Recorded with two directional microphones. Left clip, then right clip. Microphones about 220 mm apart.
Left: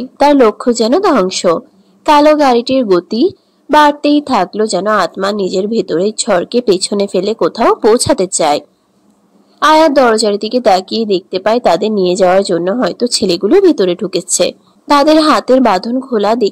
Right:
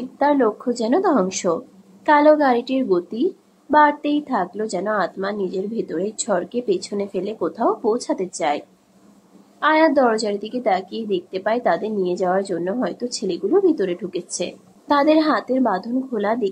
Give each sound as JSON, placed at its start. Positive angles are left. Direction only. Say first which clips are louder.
{"t": 0.2, "sound": "a woman's voice", "louder": "left 10 dB", "side_deg": 35}